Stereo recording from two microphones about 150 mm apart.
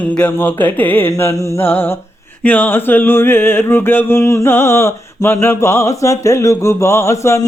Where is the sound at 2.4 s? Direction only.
10° left (ahead or behind).